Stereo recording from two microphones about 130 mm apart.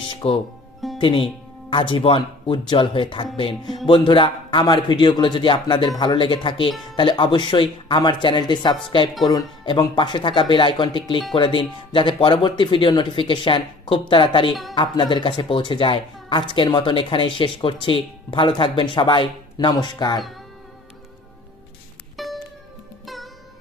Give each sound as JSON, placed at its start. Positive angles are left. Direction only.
{"t": 0.1, "sound": "music", "side_deg": 45}
{"t": 0.9, "sound": "a woman's voice", "side_deg": 40}
{"t": 22.1, "sound": "music", "side_deg": 0}